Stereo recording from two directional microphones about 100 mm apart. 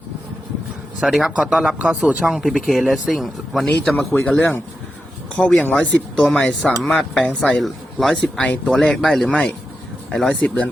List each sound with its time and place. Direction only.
1.0 s speech: centre (ahead or behind)
2.4 s speech: centre (ahead or behind)
3.9 s speech: 15° left (ahead or behind)
5.4 s speech: 5° left (ahead or behind)
7.6 s speech: centre (ahead or behind)